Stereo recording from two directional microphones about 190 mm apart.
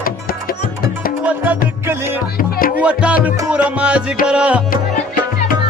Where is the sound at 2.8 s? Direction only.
5° right (ahead or behind).